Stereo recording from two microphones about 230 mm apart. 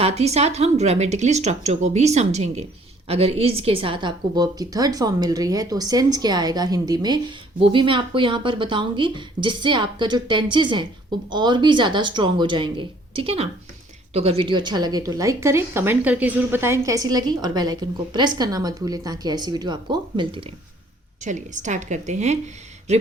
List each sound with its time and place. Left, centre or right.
0.0 s speech: right
21.2 s a woman's voice: right